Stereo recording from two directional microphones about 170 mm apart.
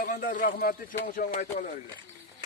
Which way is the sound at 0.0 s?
50° left (ahead or behind).